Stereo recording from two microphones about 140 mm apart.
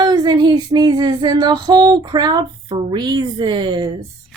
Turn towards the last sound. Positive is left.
turn(degrees=-30)  # may be behind; listen again after turning